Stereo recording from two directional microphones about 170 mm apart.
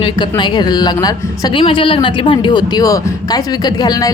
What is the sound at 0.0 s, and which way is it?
A woman's voice, 25° left (ahead or behind).